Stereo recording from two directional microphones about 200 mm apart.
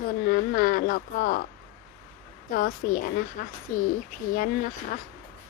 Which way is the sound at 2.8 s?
50° left (ahead or behind).